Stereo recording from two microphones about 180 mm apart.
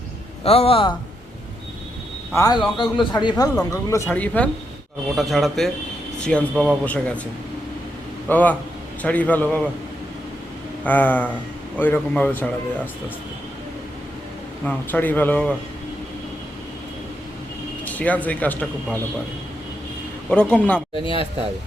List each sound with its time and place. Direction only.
0.4 s a man's voice: 35° left (ahead or behind)
2.3 s a man's voice: 20° left (ahead or behind)
8.3 s speech: 10° left (ahead or behind)
10.8 s speech: 10° left (ahead or behind)
14.6 s speech: 10° left (ahead or behind)
17.8 s speech: 10° left (ahead or behind)
20.3 s speech: 10° left (ahead or behind)
20.9 s a man's voice: 30° left (ahead or behind)